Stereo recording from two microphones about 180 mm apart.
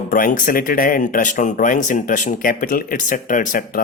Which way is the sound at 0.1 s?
50° left (ahead or behind).